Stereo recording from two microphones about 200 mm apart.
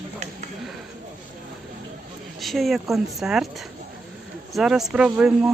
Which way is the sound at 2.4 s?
Centre (ahead or behind).